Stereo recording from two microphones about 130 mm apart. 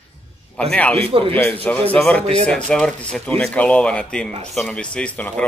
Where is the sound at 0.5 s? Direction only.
10° left (ahead or behind).